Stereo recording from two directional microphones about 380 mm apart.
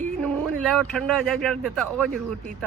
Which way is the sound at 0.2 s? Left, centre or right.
Centre.